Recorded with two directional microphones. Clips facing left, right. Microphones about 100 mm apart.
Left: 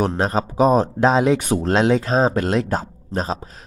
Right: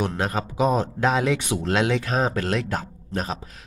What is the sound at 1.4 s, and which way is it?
Speech, 40° left (ahead or behind).